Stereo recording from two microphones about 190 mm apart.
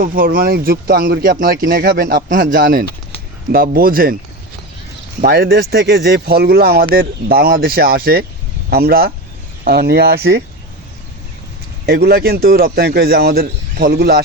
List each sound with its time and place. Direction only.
0.0 s speech: 50° right (ahead or behind)
5.2 s a man's voice: 55° right (ahead or behind)
11.9 s a man's voice: 55° right (ahead or behind)